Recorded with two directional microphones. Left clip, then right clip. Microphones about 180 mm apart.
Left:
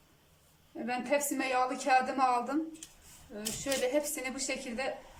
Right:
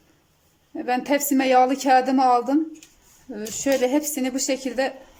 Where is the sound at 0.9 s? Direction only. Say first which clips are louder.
Right 9 dB; 45° right (ahead or behind).